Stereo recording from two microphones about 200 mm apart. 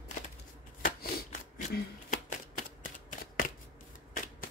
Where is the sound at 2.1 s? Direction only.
40° left (ahead or behind).